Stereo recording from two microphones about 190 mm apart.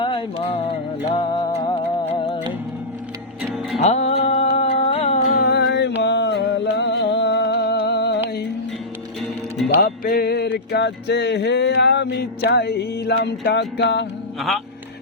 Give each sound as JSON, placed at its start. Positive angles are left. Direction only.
{"t": 0.0, "sound": "music", "side_deg": 25}
{"t": 3.8, "sound": "music", "side_deg": 35}
{"t": 5.3, "sound": "a sound", "side_deg": 60}
{"t": 6.0, "sound": "music", "side_deg": 65}
{"t": 9.6, "sound": "music", "side_deg": 50}